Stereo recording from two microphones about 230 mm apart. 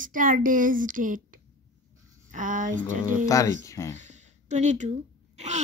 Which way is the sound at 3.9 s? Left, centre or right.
Right.